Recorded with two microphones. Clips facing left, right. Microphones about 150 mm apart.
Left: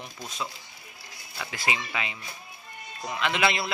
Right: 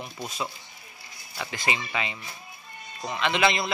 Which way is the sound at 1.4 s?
5° left (ahead or behind).